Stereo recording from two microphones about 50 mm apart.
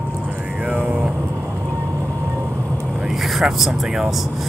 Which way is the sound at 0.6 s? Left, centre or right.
Right.